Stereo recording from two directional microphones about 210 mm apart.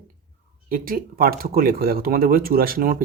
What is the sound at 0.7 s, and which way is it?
Speech, 45° right (ahead or behind).